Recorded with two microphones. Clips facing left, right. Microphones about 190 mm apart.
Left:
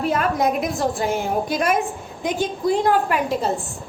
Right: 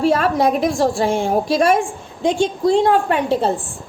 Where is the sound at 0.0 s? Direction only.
30° right (ahead or behind).